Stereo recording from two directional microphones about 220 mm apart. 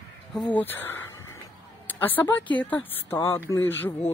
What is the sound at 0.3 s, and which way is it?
A woman's voice, 5° left (ahead or behind).